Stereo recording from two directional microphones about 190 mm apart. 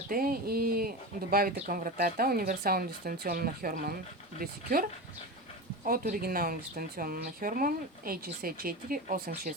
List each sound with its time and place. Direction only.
0.1 s speech: 50° right (ahead or behind)